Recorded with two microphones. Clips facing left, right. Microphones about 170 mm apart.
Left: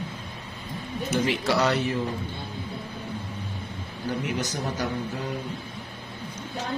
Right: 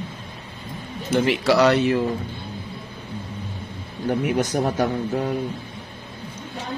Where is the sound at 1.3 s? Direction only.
85° right.